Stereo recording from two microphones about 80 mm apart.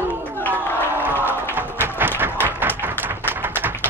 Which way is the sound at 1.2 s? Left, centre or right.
Right.